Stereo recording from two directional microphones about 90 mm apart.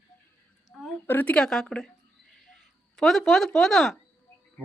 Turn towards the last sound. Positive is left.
turn(degrees=5)  # may be behind; listen again after turning